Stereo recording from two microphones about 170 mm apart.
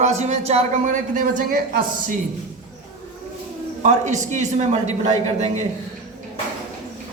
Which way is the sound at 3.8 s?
45° right (ahead or behind).